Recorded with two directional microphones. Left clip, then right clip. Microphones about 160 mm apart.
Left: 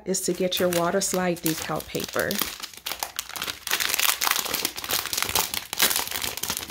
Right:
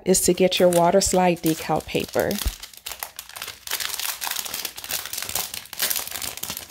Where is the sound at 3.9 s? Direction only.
15° left (ahead or behind).